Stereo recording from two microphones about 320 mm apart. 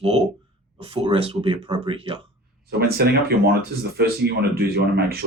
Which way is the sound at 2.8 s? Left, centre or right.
Right.